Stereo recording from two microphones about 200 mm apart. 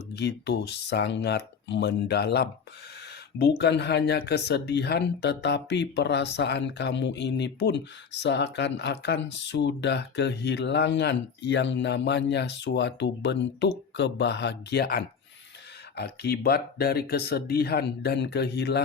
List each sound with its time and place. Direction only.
0.1 s speech: 60° left (ahead or behind)